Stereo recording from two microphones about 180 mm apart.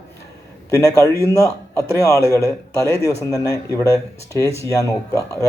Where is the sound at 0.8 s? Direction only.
15° left (ahead or behind).